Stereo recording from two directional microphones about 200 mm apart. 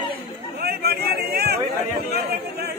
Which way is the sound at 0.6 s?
50° right (ahead or behind).